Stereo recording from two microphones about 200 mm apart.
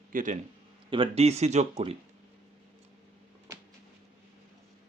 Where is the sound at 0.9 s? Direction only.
25° right (ahead or behind).